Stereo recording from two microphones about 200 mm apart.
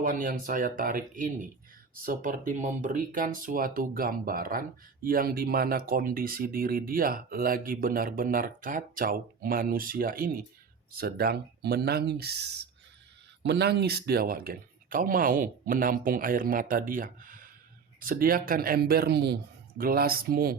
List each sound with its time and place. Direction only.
0.0 s speech: 40° right (ahead or behind)
13.4 s speech: 55° right (ahead or behind)